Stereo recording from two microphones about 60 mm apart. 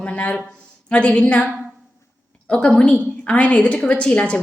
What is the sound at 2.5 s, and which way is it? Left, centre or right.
A woman's voice, centre.